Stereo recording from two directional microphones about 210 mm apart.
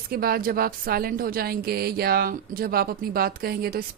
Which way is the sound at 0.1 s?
45° right (ahead or behind).